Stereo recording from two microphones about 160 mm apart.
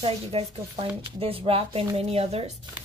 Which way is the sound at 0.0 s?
35° right (ahead or behind).